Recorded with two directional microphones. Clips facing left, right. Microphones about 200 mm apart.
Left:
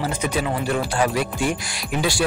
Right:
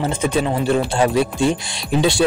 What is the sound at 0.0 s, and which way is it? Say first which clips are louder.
Speech: right 4 dB; 25° right (ahead or behind).